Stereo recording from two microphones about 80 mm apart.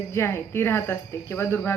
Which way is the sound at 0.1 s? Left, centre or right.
Left.